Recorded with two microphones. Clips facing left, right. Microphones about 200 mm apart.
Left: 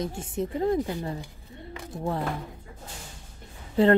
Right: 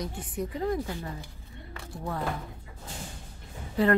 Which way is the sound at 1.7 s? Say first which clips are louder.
Left 5 dB; 20° left (ahead or behind).